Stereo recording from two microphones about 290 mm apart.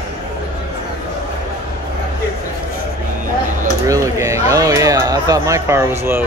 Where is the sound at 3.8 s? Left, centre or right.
Centre.